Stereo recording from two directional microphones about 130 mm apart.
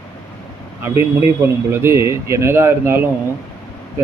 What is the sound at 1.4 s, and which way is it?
Speech, 20° right (ahead or behind).